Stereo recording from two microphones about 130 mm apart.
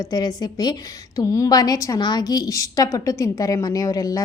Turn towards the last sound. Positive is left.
turn(degrees=30)  # may be behind; listen again after turning